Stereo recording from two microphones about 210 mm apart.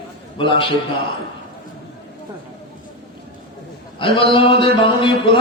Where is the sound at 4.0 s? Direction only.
25° left (ahead or behind).